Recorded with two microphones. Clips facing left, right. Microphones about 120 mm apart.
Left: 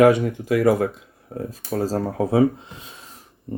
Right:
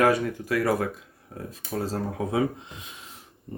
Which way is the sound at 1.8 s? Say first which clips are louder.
Left 6 dB; 40° left (ahead or behind).